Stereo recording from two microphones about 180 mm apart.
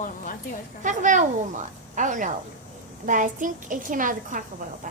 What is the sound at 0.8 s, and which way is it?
A woman's voice, 45° right (ahead or behind).